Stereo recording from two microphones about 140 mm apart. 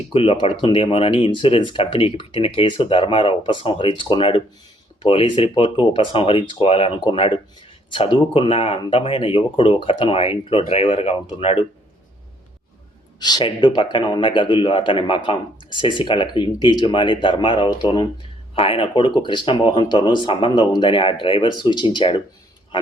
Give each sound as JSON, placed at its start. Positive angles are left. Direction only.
{"t": 0.1, "sound": "speech", "side_deg": 40}
{"t": 13.1, "sound": "speech", "side_deg": 30}
{"t": 18.5, "sound": "speech", "side_deg": 40}